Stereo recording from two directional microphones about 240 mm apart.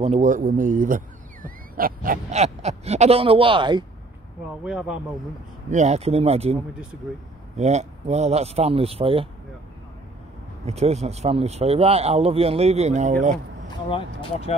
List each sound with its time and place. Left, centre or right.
0.0 s a man's voice: right
4.6 s speech: centre
5.7 s a man's voice: right
10.6 s a man's voice: right
13.8 s speech: left